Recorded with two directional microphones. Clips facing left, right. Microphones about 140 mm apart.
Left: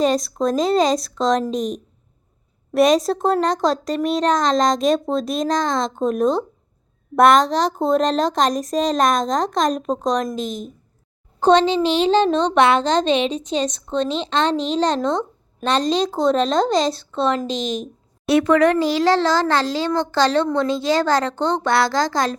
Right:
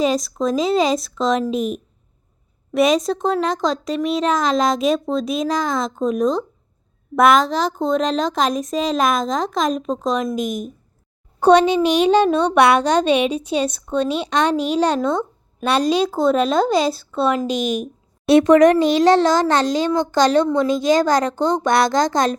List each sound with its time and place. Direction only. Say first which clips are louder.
0.0 s speech: even; centre (ahead or behind)
10.3 s a child's voice: right 3 dB; 15° right (ahead or behind)